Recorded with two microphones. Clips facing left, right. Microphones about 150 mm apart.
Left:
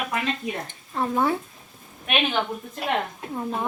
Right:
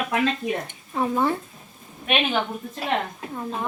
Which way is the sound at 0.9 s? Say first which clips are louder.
Right 1 dB; 5° right (ahead or behind).